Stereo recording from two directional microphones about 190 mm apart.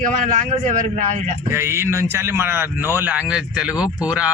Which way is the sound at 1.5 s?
15° right (ahead or behind).